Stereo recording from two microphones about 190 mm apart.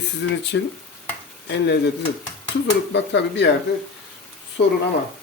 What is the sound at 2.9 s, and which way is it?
Speech, 65° left (ahead or behind).